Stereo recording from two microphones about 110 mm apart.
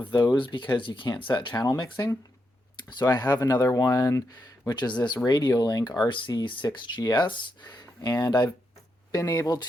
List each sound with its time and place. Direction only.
0.0 s speech: 40° left (ahead or behind)
6.0 s speech: 50° left (ahead or behind)